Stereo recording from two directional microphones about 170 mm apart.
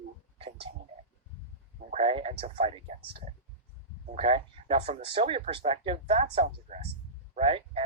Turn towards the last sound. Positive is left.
turn(degrees=-35)  # may be behind; listen again after turning